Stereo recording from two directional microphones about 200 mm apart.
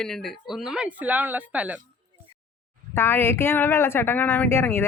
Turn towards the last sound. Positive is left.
turn(degrees=10)  # may be behind; listen again after turning